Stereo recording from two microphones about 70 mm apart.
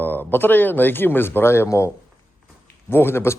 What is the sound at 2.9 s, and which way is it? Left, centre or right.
Speech, left.